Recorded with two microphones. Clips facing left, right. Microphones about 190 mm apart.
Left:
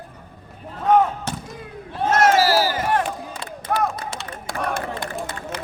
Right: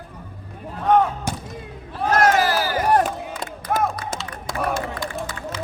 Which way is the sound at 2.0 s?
25° left (ahead or behind).